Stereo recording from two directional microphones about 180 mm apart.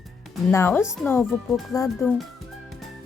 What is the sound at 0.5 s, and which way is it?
Speech, 15° left (ahead or behind).